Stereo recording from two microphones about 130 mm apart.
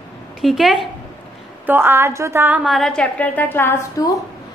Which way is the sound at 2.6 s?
Centre (ahead or behind).